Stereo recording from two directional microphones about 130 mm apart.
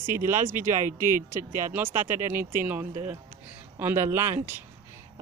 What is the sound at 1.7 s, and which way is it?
Speech, 15° right (ahead or behind).